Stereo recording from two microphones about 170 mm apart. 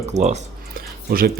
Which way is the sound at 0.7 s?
60° right (ahead or behind).